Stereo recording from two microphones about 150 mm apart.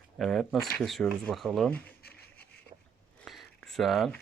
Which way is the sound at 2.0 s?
90° left.